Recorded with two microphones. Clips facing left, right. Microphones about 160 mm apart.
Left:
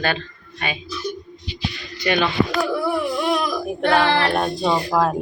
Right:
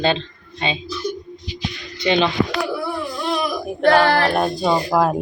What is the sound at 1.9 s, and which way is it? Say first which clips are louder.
Music: right 3 dB; 20° right (ahead or behind).